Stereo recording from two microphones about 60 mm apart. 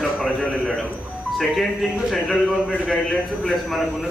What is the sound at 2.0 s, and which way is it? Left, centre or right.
Speech, centre.